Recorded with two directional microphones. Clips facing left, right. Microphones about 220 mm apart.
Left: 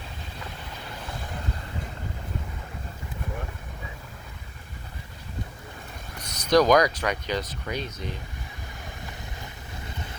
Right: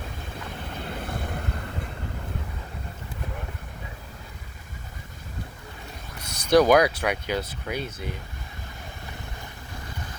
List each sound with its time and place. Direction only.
1.0 s vehicle: 60° right (ahead or behind)
6.2 s speech: 10° right (ahead or behind)